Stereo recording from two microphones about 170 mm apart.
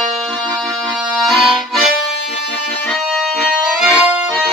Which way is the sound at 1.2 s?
Centre (ahead or behind).